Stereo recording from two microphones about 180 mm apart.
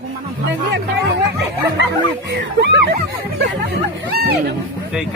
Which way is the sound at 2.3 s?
70° right (ahead or behind).